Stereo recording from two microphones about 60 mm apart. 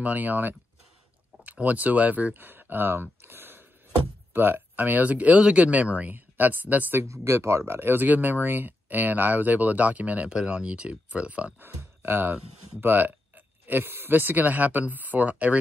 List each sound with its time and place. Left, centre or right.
0.0 s speech: right
7.0 s speech: right
11.6 s speech: right